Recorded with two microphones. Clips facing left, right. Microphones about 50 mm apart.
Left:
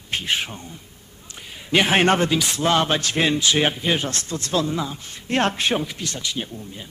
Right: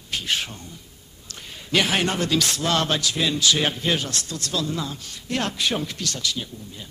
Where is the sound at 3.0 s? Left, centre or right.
Left.